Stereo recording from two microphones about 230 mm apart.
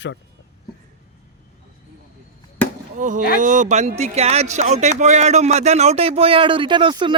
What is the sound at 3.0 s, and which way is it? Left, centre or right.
Speech, right.